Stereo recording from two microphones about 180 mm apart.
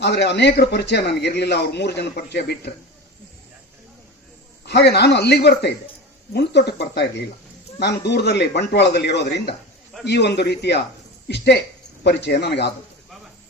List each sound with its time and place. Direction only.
0.0 s a man's voice: 70° left (ahead or behind)
4.6 s a man's voice: 70° left (ahead or behind)